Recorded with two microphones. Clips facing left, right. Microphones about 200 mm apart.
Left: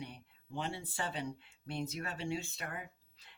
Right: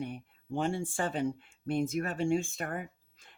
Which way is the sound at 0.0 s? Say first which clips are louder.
Right 9 dB; 50° right (ahead or behind).